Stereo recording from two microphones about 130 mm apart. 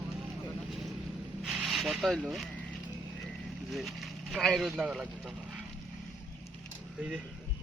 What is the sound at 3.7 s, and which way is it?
Speech, centre (ahead or behind).